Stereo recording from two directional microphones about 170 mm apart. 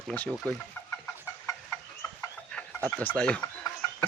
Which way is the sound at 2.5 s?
5° left (ahead or behind).